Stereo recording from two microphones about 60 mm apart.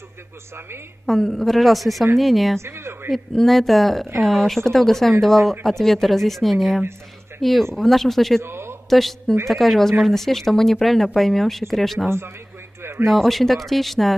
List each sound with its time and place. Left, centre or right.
1.0 s speech: centre
2.6 s a woman's voice: right
3.1 s speech: centre
8.4 s a sound: right
8.8 s a woman's voice: centre
13.1 s speech: centre